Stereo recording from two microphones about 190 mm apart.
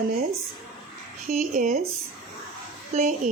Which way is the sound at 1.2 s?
40° right (ahead or behind).